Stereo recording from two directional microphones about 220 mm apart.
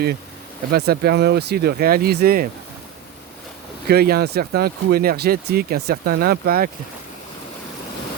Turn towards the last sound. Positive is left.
turn(degrees=-45)  # may be behind; listen again after turning